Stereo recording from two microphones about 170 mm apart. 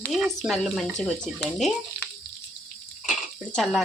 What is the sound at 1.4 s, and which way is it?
Frying, 5° left (ahead or behind).